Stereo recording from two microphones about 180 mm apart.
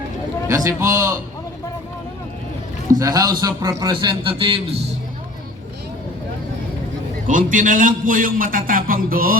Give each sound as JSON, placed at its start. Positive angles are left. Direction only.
{"t": 0.4, "sound": "a man's voice", "side_deg": -15}
{"t": 3.0, "sound": "a man's voice", "side_deg": -20}
{"t": 7.3, "sound": "a man's voice", "side_deg": -45}